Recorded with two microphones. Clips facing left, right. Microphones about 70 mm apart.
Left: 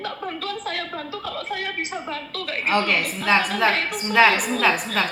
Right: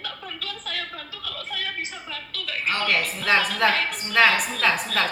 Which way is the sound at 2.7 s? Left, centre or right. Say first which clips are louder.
Left 3 dB; centre.